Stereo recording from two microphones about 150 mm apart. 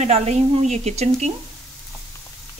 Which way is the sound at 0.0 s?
50° right (ahead or behind).